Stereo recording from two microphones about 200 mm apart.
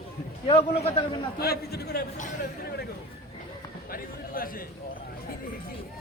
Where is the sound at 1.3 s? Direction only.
50° left (ahead or behind).